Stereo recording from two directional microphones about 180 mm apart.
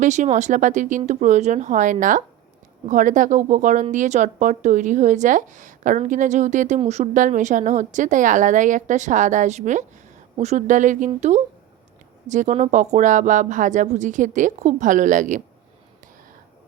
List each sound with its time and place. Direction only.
0.0 s a woman's voice: 40° right (ahead or behind)